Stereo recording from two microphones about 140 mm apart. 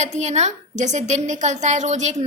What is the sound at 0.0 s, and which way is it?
A woman's voice, 55° right (ahead or behind).